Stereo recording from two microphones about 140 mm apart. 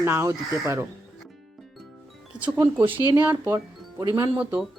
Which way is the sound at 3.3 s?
30° right (ahead or behind).